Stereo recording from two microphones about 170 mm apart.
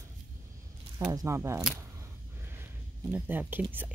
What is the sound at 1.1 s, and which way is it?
Speech, 15° right (ahead or behind).